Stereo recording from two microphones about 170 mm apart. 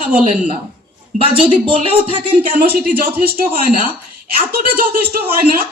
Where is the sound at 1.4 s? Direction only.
30° right (ahead or behind).